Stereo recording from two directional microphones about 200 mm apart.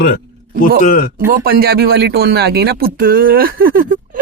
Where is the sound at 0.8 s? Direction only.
45° left (ahead or behind).